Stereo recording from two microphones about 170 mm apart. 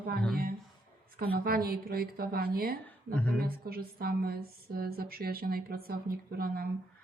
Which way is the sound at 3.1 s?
10° left (ahead or behind).